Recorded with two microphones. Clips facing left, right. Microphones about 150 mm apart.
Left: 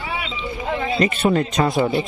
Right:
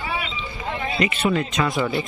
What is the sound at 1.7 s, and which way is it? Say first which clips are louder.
Speech: left 4 dB; 25° left (ahead or behind).